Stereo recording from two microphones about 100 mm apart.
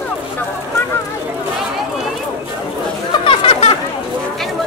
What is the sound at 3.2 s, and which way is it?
Chatter, 65° left (ahead or behind).